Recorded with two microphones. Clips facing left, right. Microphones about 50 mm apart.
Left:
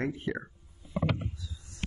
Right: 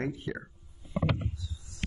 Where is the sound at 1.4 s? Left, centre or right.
Left.